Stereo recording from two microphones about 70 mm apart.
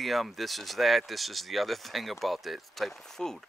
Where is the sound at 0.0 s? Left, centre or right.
Centre.